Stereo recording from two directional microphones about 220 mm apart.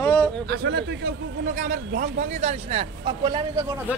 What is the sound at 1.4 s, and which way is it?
Speech, 35° right (ahead or behind).